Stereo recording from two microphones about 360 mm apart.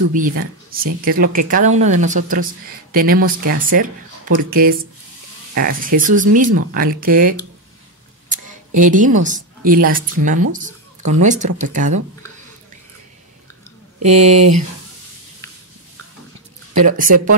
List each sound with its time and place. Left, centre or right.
0.1 s speech: right
8.3 s a sound: right
9.7 s speech: right
14.0 s speech: centre
16.8 s speech: right